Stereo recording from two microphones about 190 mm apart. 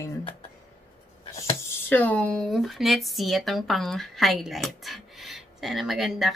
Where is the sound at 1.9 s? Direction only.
10° left (ahead or behind).